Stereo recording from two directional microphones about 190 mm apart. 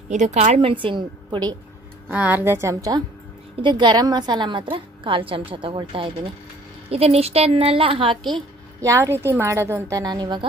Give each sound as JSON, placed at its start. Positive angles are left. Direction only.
{"t": 0.1, "sound": "a woman's voice", "side_deg": -40}
{"t": 2.0, "sound": "a woman's voice", "side_deg": -10}
{"t": 8.8, "sound": "a woman's voice", "side_deg": -15}